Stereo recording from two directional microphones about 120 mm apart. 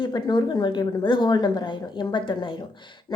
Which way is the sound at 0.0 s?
40° left (ahead or behind).